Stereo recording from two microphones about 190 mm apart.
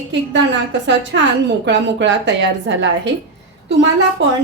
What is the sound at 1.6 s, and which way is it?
A woman's voice, 70° right (ahead or behind).